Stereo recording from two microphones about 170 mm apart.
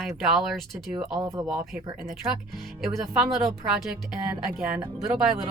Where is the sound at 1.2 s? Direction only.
20° right (ahead or behind).